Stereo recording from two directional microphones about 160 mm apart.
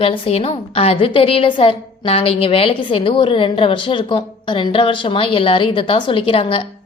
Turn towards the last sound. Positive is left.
turn(degrees=35)  # may be behind; listen again after turning